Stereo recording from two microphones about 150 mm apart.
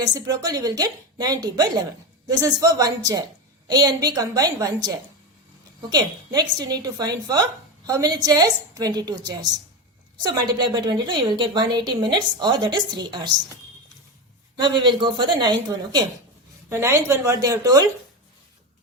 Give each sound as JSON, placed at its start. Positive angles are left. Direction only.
{"t": 0.0, "sound": "a woman's voice", "side_deg": -25}
{"t": 5.9, "sound": "a woman's voice", "side_deg": -25}
{"t": 14.5, "sound": "a woman's voice", "side_deg": -30}
{"t": 16.6, "sound": "a woman's voice", "side_deg": -20}